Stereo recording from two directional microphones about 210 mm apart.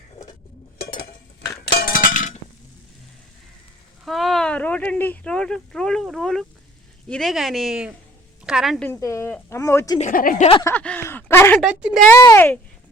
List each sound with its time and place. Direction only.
1.8 s chink: 40° left (ahead or behind)
4.0 s speech: centre (ahead or behind)
8.9 s speech: 15° left (ahead or behind)
10.0 s a woman's voice: 40° left (ahead or behind)
10.6 s speech: 10° left (ahead or behind)
11.6 s speech: 5° right (ahead or behind)
12.2 s speech: 10° left (ahead or behind)